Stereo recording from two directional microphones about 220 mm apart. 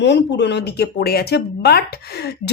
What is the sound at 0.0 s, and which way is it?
Speech, 50° left (ahead or behind).